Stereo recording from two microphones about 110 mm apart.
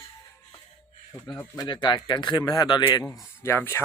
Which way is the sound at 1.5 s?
40° left (ahead or behind).